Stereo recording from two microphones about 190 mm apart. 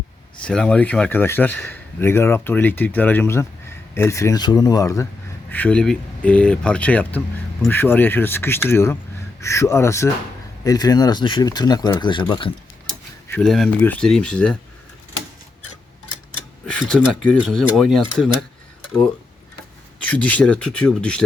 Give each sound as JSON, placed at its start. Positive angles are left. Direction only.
{"t": 0.4, "sound": "speech", "side_deg": 5}
{"t": 13.2, "sound": "speech", "side_deg": 5}
{"t": 16.6, "sound": "speech", "side_deg": 5}
{"t": 20.0, "sound": "speech", "side_deg": 5}